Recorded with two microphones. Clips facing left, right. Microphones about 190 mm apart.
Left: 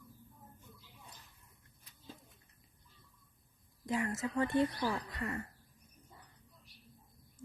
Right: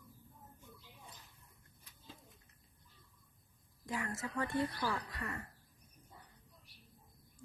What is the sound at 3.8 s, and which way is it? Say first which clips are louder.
A woman's voice: left 6 dB; 20° left (ahead or behind).